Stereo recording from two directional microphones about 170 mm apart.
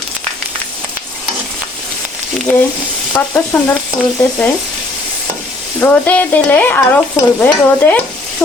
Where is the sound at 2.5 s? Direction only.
5° left (ahead or behind).